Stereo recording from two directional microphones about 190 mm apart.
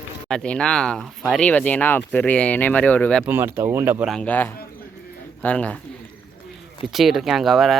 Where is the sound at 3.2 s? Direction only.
10° right (ahead or behind).